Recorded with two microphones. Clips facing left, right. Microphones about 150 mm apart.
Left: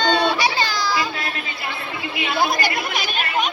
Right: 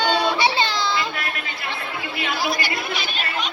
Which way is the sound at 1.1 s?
30° left (ahead or behind).